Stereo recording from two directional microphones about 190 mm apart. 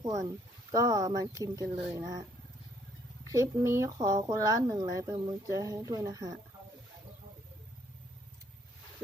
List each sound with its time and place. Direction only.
0.0 s speech: 20° right (ahead or behind)
3.2 s speech: 15° right (ahead or behind)